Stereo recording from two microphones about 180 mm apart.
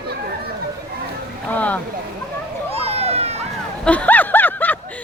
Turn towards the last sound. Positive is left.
turn(degrees=10)  # may be behind; listen again after turning